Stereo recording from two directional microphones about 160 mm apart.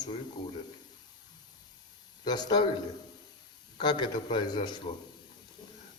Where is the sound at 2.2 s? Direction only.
25° left (ahead or behind).